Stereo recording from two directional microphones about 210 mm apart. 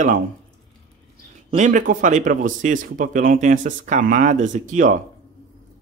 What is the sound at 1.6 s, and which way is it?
Speech, 40° right (ahead or behind).